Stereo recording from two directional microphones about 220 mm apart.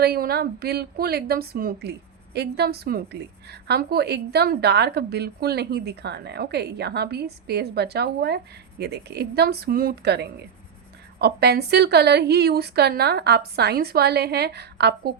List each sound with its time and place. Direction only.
0.0 s a woman's voice: 45° right (ahead or behind)